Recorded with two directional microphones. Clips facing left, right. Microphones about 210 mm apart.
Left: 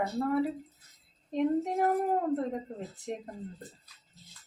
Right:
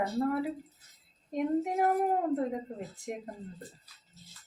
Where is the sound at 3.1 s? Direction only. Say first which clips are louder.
Left 1 dB; 10° right (ahead or behind).